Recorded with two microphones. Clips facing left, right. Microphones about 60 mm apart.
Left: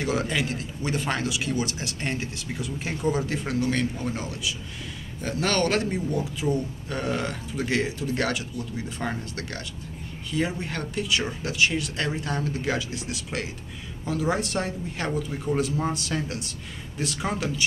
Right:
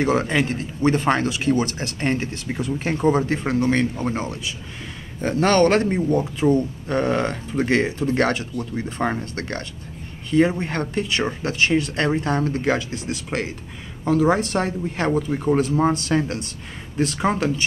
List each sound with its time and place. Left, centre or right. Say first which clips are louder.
0.0 s speech: right 6 dB; right